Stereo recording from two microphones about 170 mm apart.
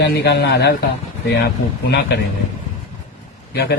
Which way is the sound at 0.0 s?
75° left (ahead or behind).